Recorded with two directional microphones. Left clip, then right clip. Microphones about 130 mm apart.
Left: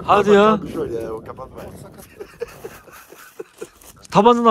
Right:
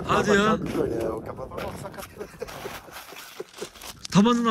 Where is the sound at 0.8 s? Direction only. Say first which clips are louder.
Left 1 dB; 60° left (ahead or behind).